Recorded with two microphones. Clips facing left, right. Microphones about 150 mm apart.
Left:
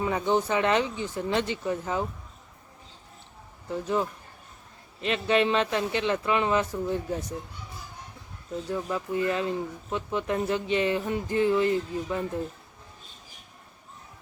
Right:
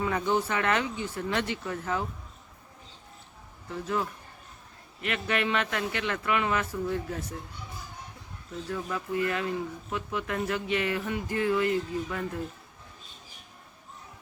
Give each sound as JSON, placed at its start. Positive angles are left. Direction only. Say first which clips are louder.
{"t": 0.0, "sound": "speech", "louder": "left 2 dB", "side_deg": 20}
{"t": 3.7, "sound": "speech", "louder": "left 3 dB", "side_deg": 20}
{"t": 8.7, "sound": "speech", "louder": "left 2 dB", "side_deg": 25}